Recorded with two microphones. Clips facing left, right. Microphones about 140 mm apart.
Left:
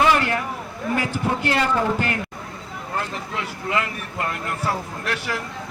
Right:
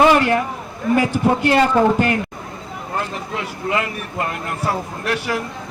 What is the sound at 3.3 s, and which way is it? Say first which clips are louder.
Speech: right 3 dB; 20° right (ahead or behind).